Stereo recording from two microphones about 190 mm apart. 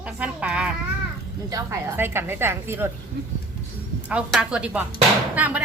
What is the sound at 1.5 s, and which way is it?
A woman's voice, 15° right (ahead or behind).